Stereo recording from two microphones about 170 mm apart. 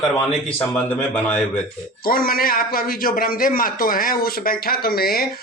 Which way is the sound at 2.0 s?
60° left (ahead or behind).